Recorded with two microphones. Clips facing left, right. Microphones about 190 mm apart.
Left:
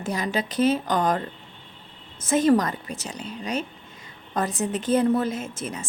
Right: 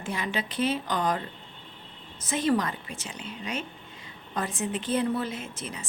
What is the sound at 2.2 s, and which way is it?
A woman's voice, 45° left (ahead or behind).